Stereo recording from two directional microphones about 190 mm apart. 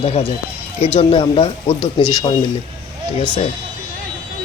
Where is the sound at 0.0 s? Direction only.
30° left (ahead or behind).